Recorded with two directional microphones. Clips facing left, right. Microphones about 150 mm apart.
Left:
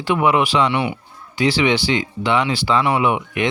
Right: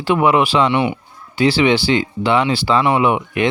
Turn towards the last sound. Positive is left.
turn(degrees=-30)  # may be behind; listen again after turning